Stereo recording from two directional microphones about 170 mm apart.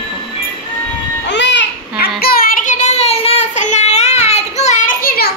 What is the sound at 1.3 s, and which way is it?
Babbling, 90° left.